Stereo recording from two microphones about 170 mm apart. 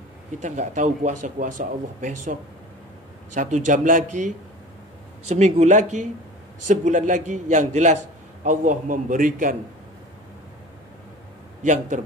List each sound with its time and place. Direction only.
0.4 s speech: 45° right (ahead or behind)
3.3 s speech: 45° right (ahead or behind)
5.3 s speech: 40° right (ahead or behind)
11.6 s speech: 45° right (ahead or behind)